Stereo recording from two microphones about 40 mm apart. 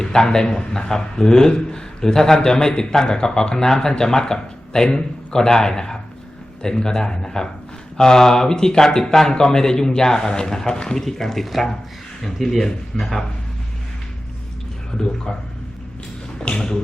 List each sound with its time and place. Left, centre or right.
0.0 s a man's voice: centre
15.0 s a man's voice: centre
16.4 s a sound: left